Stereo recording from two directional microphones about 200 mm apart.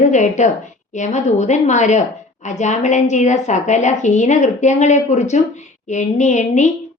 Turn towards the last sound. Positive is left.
turn(degrees=35)  # may be behind; listen again after turning